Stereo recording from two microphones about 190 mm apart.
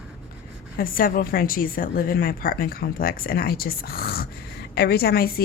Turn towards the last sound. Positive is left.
turn(degrees=55)  # may be behind; listen again after turning